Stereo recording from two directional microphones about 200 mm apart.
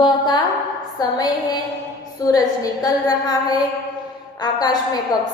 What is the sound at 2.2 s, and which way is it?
Speech, 15° left (ahead or behind).